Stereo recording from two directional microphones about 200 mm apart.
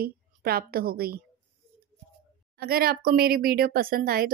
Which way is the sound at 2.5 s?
50° right (ahead or behind).